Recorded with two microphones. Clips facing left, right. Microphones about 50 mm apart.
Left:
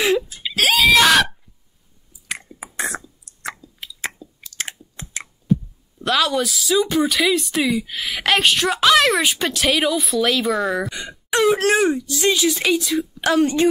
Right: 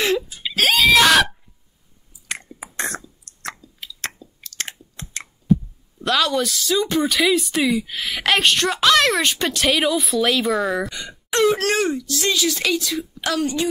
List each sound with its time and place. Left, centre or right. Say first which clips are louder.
0.0 s wail: left 2 dB; centre
2.2 s a sound: even; centre
11.0 s speech: right 1 dB; centre
13.2 s speech: left 5 dB; left